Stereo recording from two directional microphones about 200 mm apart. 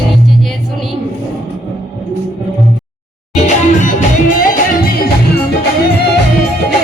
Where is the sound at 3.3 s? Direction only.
35° left (ahead or behind).